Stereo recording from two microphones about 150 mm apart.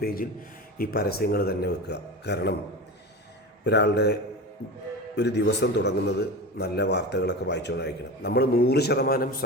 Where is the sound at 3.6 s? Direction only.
90° left.